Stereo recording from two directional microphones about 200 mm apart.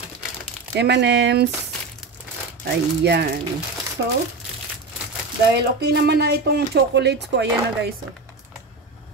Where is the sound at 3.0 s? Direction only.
55° right (ahead or behind).